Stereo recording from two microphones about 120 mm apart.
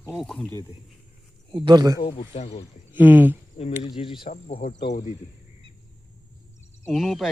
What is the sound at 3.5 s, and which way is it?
Insect, 55° left (ahead or behind).